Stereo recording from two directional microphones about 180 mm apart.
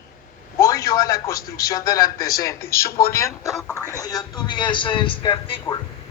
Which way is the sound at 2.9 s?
55° left (ahead or behind).